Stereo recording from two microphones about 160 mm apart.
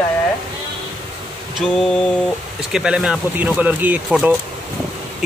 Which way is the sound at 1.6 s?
5° left (ahead or behind).